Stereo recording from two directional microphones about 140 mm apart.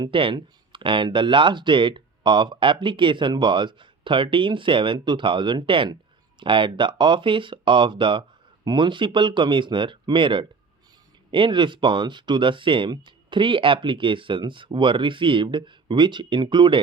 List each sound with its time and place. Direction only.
0.0 s speech: 40° right (ahead or behind)